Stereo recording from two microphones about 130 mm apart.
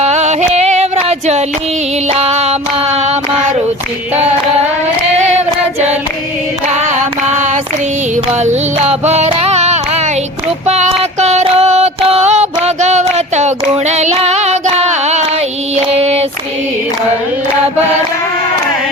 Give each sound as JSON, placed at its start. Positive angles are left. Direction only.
{"t": 0.0, "sound": "music", "side_deg": -55}
{"t": 2.0, "sound": "a sound", "side_deg": -55}
{"t": 5.1, "sound": "child singing", "side_deg": -55}
{"t": 6.7, "sound": "female singing", "side_deg": -65}
{"t": 8.4, "sound": "music", "side_deg": -55}
{"t": 10.7, "sound": "a sound", "side_deg": -60}
{"t": 12.6, "sound": "female singing", "side_deg": -60}
{"t": 15.7, "sound": "child singing", "side_deg": -55}